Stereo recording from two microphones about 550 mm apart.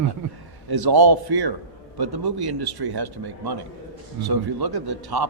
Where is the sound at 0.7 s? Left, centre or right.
Right.